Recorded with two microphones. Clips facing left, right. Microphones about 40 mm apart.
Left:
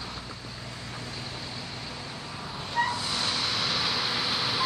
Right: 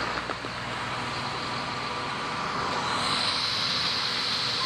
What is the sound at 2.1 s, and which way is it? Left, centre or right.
Vehicle, right.